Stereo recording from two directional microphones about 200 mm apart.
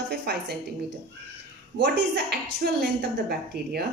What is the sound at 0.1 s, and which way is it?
Speech, 55° right (ahead or behind).